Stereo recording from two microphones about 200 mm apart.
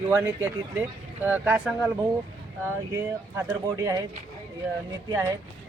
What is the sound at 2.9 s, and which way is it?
Speech, 15° right (ahead or behind).